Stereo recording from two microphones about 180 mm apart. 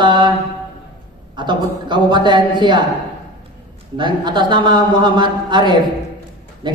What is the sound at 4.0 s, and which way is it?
A man's voice, 25° right (ahead or behind).